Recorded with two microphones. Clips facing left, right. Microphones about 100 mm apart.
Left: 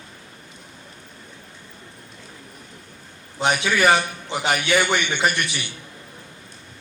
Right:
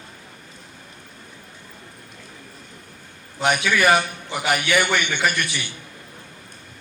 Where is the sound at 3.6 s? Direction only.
25° left (ahead or behind).